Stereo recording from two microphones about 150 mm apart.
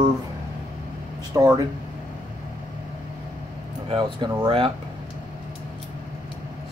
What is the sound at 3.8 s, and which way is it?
Speech, 35° right (ahead or behind).